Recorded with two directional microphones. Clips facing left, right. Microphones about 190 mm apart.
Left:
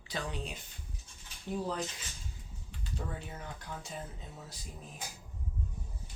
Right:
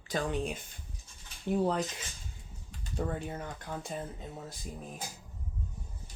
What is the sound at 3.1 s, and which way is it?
Speech, 50° right (ahead or behind).